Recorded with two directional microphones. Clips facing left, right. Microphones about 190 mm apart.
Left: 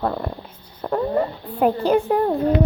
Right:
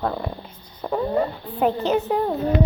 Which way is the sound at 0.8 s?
Centre (ahead or behind).